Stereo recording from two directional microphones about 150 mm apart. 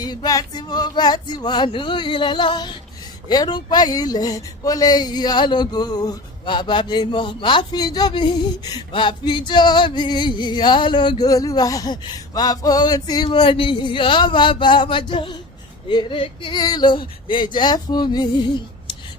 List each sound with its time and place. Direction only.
0.0 s speech: 25° left (ahead or behind)
15.9 s female singing: 30° left (ahead or behind)